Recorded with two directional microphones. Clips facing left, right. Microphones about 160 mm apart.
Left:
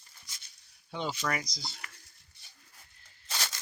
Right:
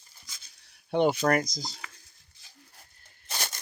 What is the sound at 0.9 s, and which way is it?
Speech, 60° right (ahead or behind).